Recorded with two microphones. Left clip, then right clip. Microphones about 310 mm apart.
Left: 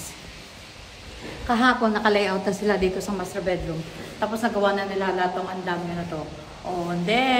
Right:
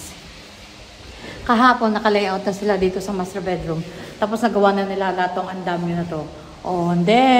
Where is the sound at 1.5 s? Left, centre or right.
Right.